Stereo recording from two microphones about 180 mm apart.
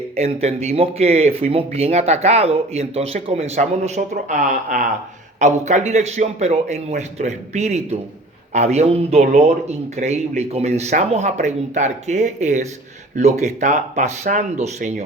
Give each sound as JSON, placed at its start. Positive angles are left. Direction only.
{"t": 0.2, "sound": "speech", "side_deg": -35}